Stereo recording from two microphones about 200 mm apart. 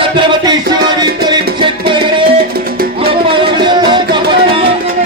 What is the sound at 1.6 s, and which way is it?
Music, 25° right (ahead or behind).